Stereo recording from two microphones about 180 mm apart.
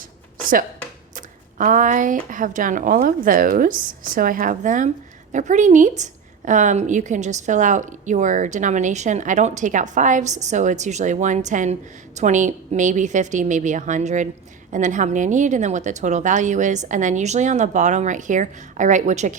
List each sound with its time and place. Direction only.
1.1 s a woman's voice: 45° right (ahead or behind)